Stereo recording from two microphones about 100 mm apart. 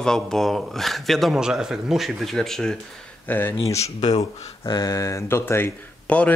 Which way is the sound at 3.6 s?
30° left (ahead or behind).